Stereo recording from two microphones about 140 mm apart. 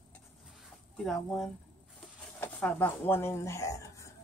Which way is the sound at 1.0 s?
5° left (ahead or behind).